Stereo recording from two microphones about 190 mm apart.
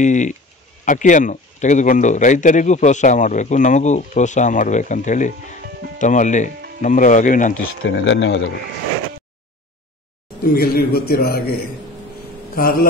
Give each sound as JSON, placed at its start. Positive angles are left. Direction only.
{"t": 0.0, "sound": "speech", "side_deg": 40}
{"t": 7.7, "sound": "speech", "side_deg": 85}
{"t": 10.4, "sound": "a man's voice", "side_deg": 50}
{"t": 12.5, "sound": "a man's voice", "side_deg": 50}